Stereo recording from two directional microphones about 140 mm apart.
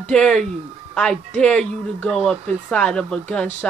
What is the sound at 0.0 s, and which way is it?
A man's voice, 5° left (ahead or behind).